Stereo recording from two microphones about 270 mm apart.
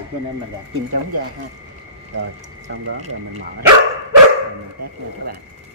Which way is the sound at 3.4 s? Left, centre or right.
Right.